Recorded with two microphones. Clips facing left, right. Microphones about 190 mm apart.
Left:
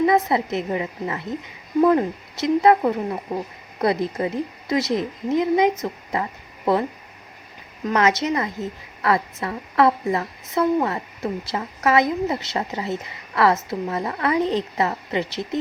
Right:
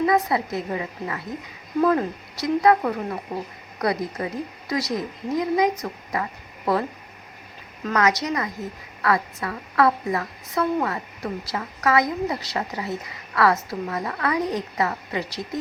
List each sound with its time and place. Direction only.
0.0 s a woman's voice: 25° left (ahead or behind)
7.9 s a woman's voice: 25° left (ahead or behind)